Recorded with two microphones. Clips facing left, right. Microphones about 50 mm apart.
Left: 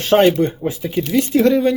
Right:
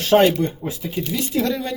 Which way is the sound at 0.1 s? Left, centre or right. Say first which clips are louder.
Left 2 dB; left.